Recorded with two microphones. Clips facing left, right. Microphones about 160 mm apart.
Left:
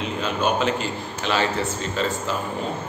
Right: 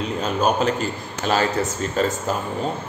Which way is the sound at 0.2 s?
40° right (ahead or behind).